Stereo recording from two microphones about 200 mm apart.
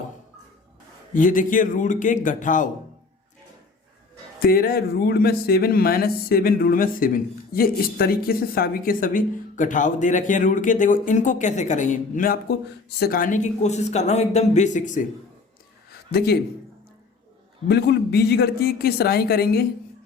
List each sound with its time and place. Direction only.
1.1 s speech: 40° left (ahead or behind)
4.4 s speech: 50° left (ahead or behind)
16.1 s speech: 50° left (ahead or behind)
17.7 s speech: 60° left (ahead or behind)